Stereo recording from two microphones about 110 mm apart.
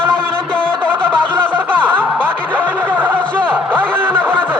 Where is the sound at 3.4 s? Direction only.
15° right (ahead or behind).